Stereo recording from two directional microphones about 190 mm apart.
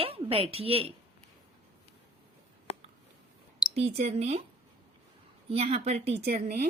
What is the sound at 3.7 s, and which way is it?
Speech, 35° right (ahead or behind).